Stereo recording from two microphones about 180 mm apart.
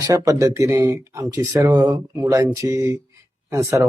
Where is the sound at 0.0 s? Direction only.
20° right (ahead or behind).